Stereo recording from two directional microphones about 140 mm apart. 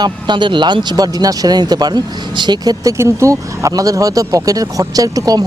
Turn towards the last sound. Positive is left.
turn(degrees=-25)  # may be behind; listen again after turning